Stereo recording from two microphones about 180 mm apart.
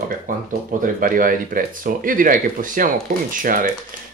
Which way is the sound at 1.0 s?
50° right (ahead or behind).